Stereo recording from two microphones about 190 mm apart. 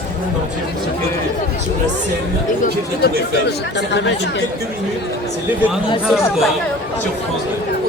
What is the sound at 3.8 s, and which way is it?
Speech, 65° left (ahead or behind).